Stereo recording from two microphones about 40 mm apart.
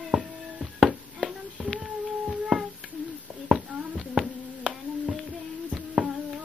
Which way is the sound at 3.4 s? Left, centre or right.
Centre.